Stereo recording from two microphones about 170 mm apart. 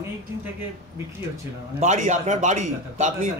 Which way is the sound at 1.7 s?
45° right (ahead or behind).